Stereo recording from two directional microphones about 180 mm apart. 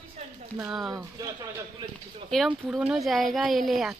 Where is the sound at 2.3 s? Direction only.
Centre (ahead or behind).